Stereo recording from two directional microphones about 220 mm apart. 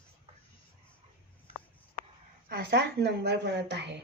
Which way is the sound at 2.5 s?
50° right (ahead or behind).